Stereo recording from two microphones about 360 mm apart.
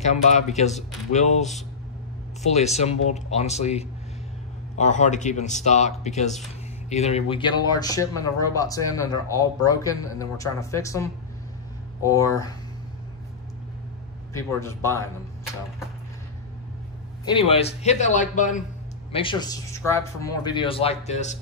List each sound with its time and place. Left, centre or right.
0.0 s speech: centre
14.3 s speech: centre
17.3 s speech: centre